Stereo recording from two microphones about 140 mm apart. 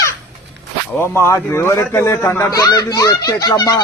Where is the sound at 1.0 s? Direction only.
15° left (ahead or behind).